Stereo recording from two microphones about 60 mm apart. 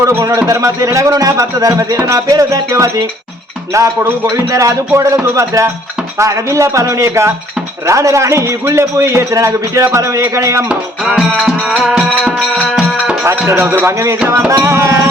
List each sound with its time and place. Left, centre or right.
0.2 s a man's voice: right
0.9 s a man's voice: right
1.4 s a man's voice: right
2.6 s a man's voice: right
4.9 s a man's voice: right
10.7 s music: centre
13.8 s music: right